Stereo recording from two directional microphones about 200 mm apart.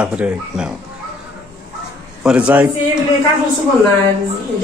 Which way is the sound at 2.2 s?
5° right (ahead or behind).